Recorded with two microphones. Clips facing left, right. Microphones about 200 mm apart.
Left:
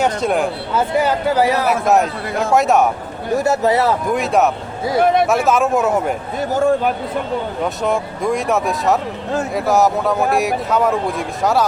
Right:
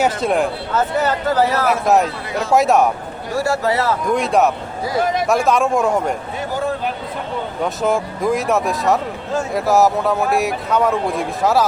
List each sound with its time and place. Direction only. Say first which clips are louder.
0.0 s speech: even; centre (ahead or behind)
0.7 s speech: left 4 dB; 10° left (ahead or behind)
1.6 s speech: even; centre (ahead or behind)
3.3 s speech: left 3 dB; 20° left (ahead or behind)
4.1 s speech: right 3 dB; centre (ahead or behind)
4.9 s speech: left 5 dB; 60° left (ahead or behind)
5.5 s speech: left 1 dB; 5° left (ahead or behind)
6.5 s a sound: left 7 dB; 50° left (ahead or behind)
7.6 s speech: right 3 dB; centre (ahead or behind)